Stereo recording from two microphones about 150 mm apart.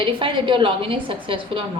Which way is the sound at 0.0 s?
35° right (ahead or behind).